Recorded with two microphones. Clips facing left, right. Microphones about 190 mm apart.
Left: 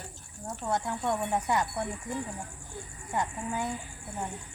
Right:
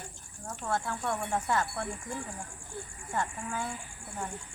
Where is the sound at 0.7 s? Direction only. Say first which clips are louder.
Left 2 dB; 20° left (ahead or behind).